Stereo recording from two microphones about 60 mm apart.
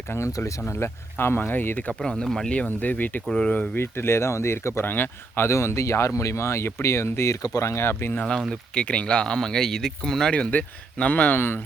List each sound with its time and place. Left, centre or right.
0.6 s speech: left
1.9 s speech: centre
2.5 s speech: left
3.8 s speech: left
5.5 s speech: left
8.4 s speech: centre
10.3 s speech: left
11.3 s speech: left